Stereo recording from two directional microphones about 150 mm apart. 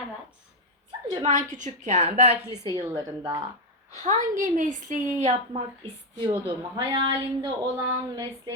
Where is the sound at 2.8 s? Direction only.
20° right (ahead or behind).